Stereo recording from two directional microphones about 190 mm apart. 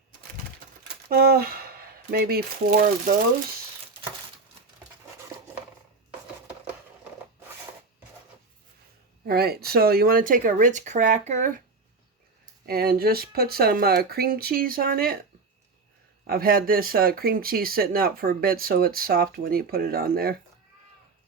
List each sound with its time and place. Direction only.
1.1 s speech: 55° right (ahead or behind)
9.2 s speech: 55° right (ahead or behind)
12.6 s speech: 55° right (ahead or behind)
16.2 s speech: 50° right (ahead or behind)